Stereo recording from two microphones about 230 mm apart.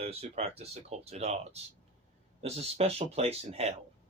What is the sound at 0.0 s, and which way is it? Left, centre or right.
Speech, right.